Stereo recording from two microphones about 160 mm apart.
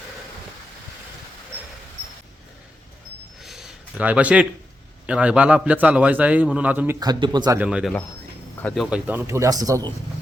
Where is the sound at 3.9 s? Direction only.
10° right (ahead or behind).